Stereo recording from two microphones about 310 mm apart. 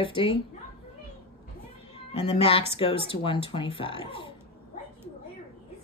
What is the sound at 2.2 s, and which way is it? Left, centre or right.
Speech, centre.